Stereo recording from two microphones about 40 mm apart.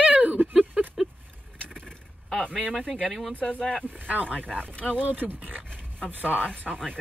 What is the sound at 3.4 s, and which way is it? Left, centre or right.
Speech, left.